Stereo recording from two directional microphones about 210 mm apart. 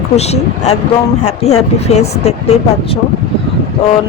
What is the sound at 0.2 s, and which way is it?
Speech, 30° left (ahead or behind).